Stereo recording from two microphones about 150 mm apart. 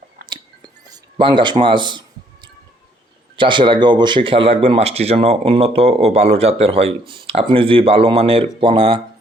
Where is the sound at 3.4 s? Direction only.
35° right (ahead or behind).